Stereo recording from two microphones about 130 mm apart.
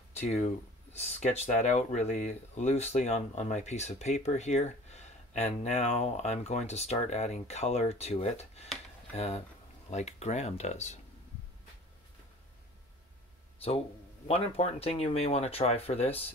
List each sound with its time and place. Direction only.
0.1 s speech: 55° left (ahead or behind)
13.6 s speech: 45° left (ahead or behind)